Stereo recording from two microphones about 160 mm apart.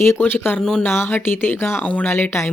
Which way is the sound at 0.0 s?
15° left (ahead or behind).